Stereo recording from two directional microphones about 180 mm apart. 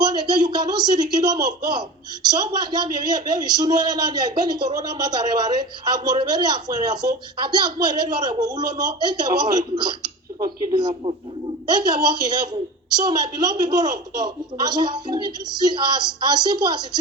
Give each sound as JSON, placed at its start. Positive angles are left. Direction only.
{"t": 0.0, "sound": "a man's voice", "side_deg": -25}